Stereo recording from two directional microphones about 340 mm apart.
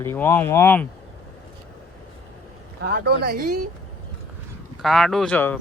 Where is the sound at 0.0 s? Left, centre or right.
Centre.